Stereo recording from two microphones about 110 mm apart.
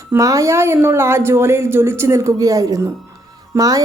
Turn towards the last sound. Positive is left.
turn(degrees=-35)  # may be behind; listen again after turning